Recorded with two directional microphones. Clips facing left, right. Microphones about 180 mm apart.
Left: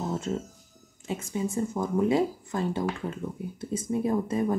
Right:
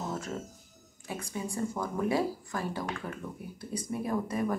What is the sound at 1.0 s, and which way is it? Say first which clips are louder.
Speech: left 6 dB; 20° left (ahead or behind).